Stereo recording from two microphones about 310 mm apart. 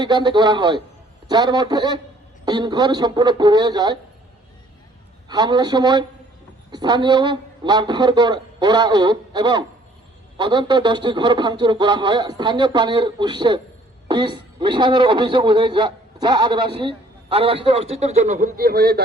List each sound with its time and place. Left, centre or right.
0.0 s a man's voice: centre
5.3 s a man's voice: centre; by 19.0 s right